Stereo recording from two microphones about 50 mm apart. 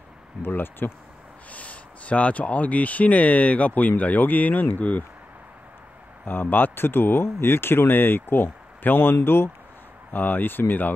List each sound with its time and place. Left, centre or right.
0.4 s speech: left
1.5 s speech: left
6.2 s speech: left
10.1 s speech: left